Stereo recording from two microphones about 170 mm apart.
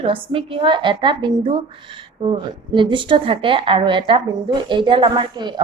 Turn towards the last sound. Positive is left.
turn(degrees=-25)  # may be behind; listen again after turning